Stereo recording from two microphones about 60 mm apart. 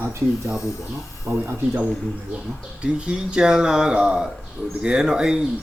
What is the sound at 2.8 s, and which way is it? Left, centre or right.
Speech, centre.